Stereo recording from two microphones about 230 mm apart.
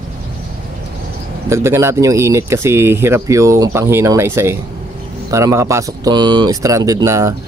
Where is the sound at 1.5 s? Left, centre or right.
Centre.